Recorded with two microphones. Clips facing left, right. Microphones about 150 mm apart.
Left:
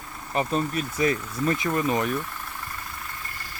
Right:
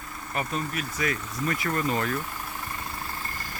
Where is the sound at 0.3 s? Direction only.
30° left (ahead or behind).